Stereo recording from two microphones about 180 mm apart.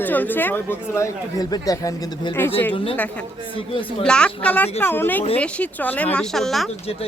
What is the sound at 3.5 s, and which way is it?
Speech, 30° left (ahead or behind).